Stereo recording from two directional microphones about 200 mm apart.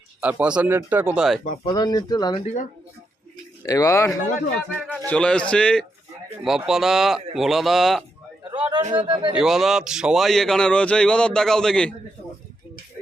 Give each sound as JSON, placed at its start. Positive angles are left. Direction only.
{"t": 0.2, "sound": "speech", "side_deg": -5}
{"t": 1.6, "sound": "speech", "side_deg": 20}
{"t": 2.4, "sound": "speech", "side_deg": 35}
{"t": 3.7, "sound": "a man's voice", "side_deg": 15}
{"t": 8.4, "sound": "a man's voice", "side_deg": -25}
{"t": 9.3, "sound": "a man's voice", "side_deg": 0}